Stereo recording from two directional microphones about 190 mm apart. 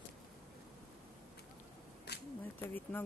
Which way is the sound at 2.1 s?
60° left (ahead or behind).